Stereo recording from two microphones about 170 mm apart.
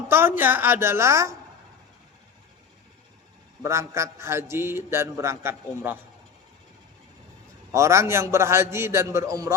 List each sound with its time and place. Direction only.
0.1 s a man's voice: 10° right (ahead or behind)
3.6 s a man's voice: 15° right (ahead or behind)
7.7 s a man's voice: 15° right (ahead or behind)